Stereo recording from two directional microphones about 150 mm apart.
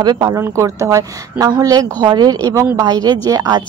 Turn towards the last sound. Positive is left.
turn(degrees=-25)  # may be behind; listen again after turning